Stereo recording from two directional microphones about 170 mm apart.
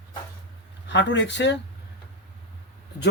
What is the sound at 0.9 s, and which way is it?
Speech, 90° left.